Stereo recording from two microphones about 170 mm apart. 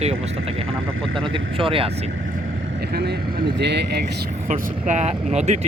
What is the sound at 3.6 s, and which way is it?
Speech, 85° right.